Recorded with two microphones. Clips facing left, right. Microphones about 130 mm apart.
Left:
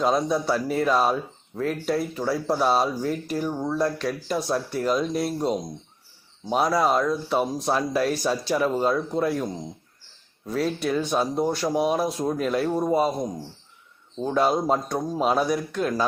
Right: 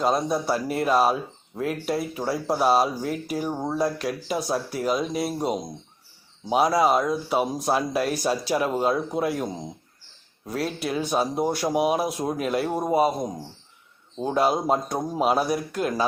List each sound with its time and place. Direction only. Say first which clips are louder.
0.0 s speech: left 1 dB; 5° right (ahead or behind)
3.5 s speech: left 1 dB; 20° right (ahead or behind)
3.8 s speech: even; 10° right (ahead or behind)